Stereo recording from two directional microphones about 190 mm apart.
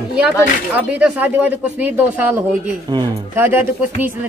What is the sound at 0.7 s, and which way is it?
Speech, 5° right (ahead or behind).